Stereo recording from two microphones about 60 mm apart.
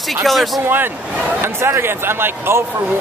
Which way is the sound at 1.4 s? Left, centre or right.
Right.